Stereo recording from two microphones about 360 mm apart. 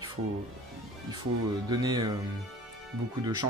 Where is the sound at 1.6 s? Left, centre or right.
Centre.